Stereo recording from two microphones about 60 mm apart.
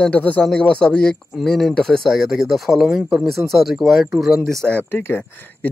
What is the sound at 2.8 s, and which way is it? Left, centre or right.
Speech, centre.